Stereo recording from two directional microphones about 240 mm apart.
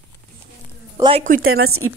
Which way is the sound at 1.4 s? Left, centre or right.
Right.